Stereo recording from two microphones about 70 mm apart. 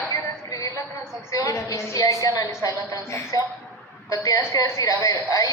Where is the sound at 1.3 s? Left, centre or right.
Left.